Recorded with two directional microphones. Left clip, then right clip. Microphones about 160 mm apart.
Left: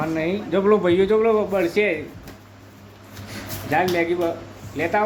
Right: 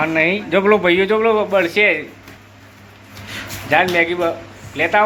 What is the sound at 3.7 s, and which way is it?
Speech, centre (ahead or behind).